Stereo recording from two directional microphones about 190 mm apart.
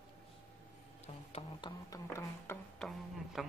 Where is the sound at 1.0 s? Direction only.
30° left (ahead or behind).